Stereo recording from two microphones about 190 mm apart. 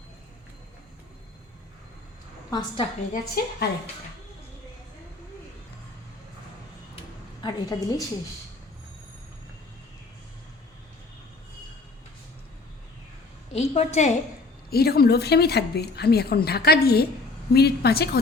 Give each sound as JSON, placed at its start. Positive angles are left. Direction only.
{"t": 2.5, "sound": "a woman's voice", "side_deg": 20}
{"t": 3.1, "sound": "a woman's voice", "side_deg": 50}
{"t": 7.4, "sound": "a woman's voice", "side_deg": 20}
{"t": 13.5, "sound": "a woman's voice", "side_deg": 35}
{"t": 14.7, "sound": "a woman's voice", "side_deg": 55}